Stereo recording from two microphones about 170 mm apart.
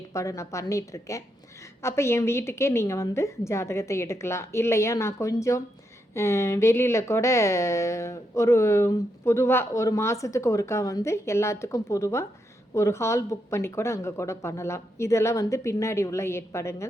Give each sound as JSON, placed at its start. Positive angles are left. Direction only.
{"t": 0.1, "sound": "speech", "side_deg": 20}